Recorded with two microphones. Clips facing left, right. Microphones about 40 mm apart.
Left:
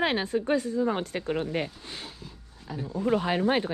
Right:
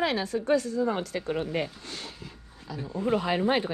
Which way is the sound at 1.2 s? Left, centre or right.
Left.